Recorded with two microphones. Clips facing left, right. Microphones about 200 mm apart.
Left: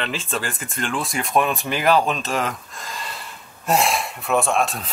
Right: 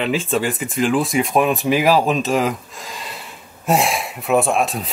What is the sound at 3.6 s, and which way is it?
Speech, centre (ahead or behind).